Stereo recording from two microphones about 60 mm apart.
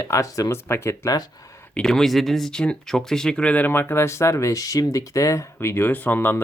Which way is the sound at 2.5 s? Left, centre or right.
Centre.